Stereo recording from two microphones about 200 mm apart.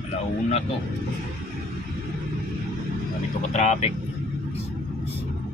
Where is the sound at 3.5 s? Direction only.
35° left (ahead or behind).